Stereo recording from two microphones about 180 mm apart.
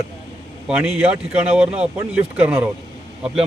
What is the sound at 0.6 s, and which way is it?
Speech, 5° right (ahead or behind).